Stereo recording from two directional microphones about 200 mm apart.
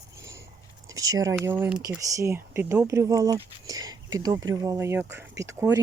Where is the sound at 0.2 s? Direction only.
15° right (ahead or behind).